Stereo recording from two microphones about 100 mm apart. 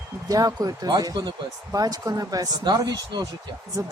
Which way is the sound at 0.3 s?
35° right (ahead or behind).